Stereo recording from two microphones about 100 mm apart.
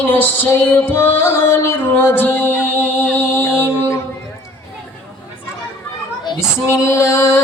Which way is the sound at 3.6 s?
25° left (ahead or behind).